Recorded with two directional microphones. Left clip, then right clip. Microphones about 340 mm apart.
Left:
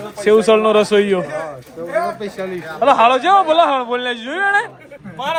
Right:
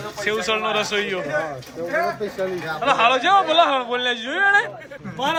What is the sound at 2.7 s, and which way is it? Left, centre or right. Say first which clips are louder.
Speech: left 6 dB; centre.